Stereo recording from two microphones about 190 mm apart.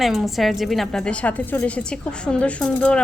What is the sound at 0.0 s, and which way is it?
A woman's voice, centre (ahead or behind).